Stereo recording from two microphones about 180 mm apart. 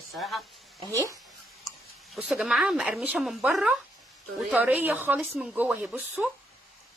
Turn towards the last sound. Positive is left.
turn(degrees=-5)  # may be behind; listen again after turning